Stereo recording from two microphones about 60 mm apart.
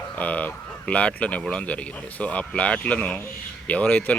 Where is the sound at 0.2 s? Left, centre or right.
Left.